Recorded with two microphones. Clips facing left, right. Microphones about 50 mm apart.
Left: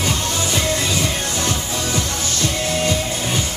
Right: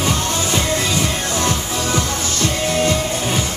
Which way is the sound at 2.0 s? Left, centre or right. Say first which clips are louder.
Right 2 dB; right.